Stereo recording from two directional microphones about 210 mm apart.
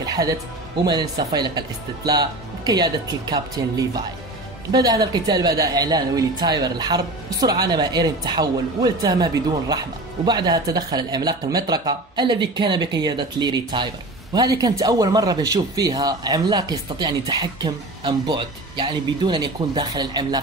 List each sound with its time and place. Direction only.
0.0 s music: 20° right (ahead or behind)
0.8 s a man's voice: 20° right (ahead or behind)